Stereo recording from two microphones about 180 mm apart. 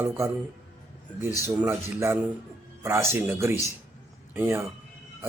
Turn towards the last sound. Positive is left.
turn(degrees=-15)  # may be behind; listen again after turning